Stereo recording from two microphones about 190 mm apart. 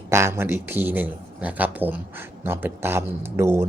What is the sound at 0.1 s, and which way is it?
Speech, 15° right (ahead or behind).